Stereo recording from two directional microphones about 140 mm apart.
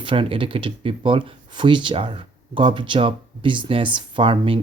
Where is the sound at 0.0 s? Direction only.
40° right (ahead or behind).